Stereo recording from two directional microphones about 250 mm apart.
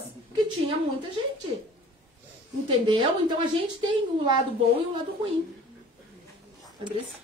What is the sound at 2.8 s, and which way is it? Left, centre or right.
Speech, centre.